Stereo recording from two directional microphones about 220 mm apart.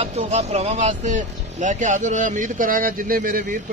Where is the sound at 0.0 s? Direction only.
30° right (ahead or behind).